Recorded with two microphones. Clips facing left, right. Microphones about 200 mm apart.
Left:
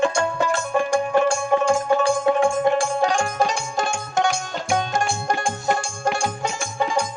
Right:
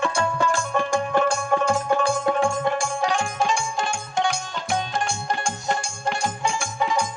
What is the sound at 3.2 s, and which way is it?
Music, 40° left (ahead or behind).